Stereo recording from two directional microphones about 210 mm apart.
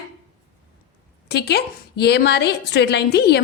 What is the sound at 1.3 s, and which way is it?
A woman's voice, 50° left (ahead or behind).